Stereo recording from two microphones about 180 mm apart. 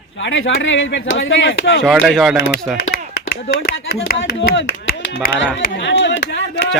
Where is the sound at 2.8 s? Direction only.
60° left (ahead or behind); by 4.5 s 80° left.